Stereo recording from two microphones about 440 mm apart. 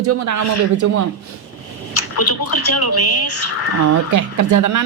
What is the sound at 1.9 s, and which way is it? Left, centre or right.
Speech, left.